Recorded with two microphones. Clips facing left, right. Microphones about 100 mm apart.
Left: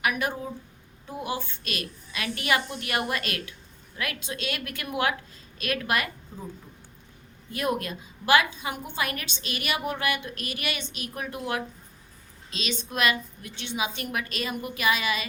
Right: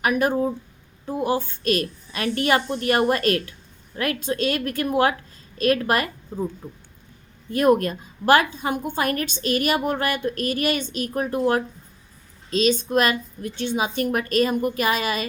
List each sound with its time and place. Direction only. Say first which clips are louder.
0.0 s a woman's voice: right 8 dB; 40° right (ahead or behind)
7.5 s a woman's voice: right 10 dB; 45° right (ahead or behind)